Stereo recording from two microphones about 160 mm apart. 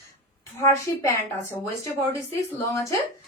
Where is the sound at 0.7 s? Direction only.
15° left (ahead or behind).